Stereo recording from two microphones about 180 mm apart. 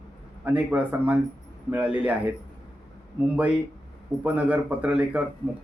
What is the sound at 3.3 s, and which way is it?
Speech, 5° right (ahead or behind).